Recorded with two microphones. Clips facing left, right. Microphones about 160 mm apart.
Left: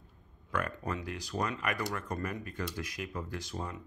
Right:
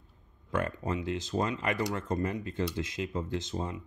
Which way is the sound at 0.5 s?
25° right (ahead or behind).